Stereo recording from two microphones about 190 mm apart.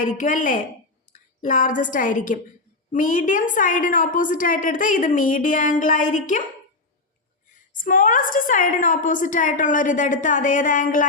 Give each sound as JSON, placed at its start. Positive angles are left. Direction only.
{"t": 0.0, "sound": "a woman's voice", "side_deg": 40}
{"t": 7.8, "sound": "a woman's voice", "side_deg": 45}